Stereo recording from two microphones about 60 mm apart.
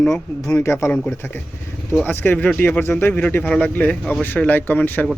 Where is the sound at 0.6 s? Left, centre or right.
Left.